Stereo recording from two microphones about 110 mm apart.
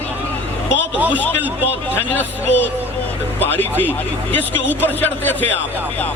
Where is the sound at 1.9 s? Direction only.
20° left (ahead or behind).